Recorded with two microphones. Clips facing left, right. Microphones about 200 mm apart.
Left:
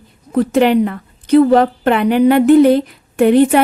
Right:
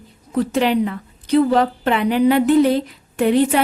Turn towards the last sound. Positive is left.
turn(degrees=55)  # may be behind; listen again after turning